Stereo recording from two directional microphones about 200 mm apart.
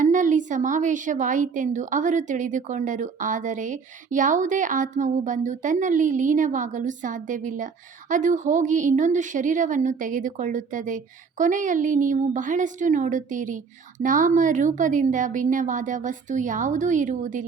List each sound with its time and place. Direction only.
0.0 s a woman's voice: 40° right (ahead or behind)